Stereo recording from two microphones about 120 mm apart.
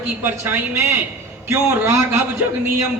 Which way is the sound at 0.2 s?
20° right (ahead or behind).